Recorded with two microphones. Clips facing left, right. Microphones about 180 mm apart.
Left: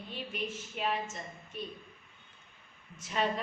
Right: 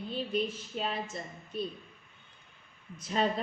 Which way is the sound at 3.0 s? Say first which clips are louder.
Right 2 dB; 35° right (ahead or behind).